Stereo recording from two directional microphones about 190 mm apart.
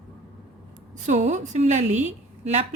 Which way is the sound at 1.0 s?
40° right (ahead or behind).